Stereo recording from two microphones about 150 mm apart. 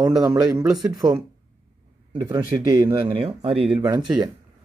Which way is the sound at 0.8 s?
25° right (ahead or behind).